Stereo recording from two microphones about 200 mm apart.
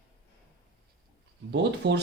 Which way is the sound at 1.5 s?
60° right (ahead or behind).